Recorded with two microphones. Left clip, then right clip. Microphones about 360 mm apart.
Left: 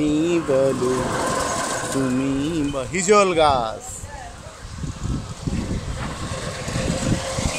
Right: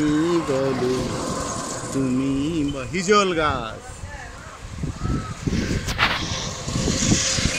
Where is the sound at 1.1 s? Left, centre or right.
Left.